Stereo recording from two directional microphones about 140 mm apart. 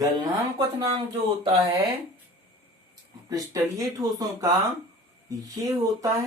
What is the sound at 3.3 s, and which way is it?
Speech, 25° right (ahead or behind).